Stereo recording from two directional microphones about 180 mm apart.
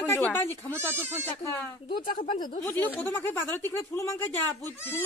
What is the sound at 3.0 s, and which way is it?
A child's voice, 10° left (ahead or behind).